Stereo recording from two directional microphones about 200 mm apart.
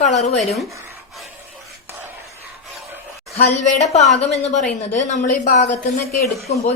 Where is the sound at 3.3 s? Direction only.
35° left (ahead or behind).